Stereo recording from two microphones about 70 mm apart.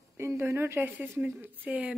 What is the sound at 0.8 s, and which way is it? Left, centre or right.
A woman's voice, right.